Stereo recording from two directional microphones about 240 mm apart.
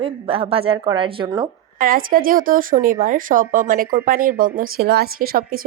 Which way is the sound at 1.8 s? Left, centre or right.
Right.